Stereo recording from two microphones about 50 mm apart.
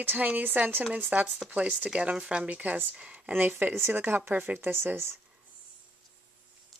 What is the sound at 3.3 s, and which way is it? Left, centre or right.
Speech, right.